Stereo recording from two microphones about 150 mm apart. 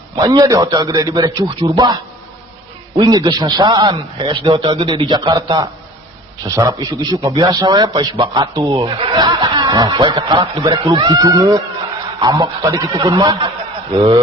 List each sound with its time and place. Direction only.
0.2 s a man's voice: 25° right (ahead or behind)